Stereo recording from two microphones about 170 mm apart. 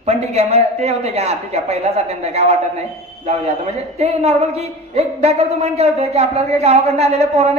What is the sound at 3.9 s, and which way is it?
A woman's voice, 40° right (ahead or behind).